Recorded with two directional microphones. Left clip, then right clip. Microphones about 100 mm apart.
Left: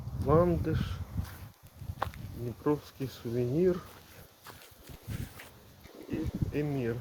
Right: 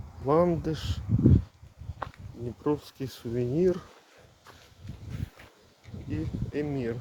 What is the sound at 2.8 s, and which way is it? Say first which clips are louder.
Speech: right 2 dB; 50° right (ahead or behind).